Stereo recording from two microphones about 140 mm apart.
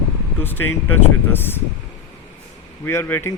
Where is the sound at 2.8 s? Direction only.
15° left (ahead or behind).